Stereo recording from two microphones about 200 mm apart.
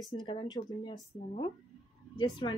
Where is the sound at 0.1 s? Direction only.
25° left (ahead or behind).